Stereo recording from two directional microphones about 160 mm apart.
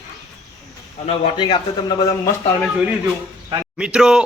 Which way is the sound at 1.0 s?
40° left (ahead or behind).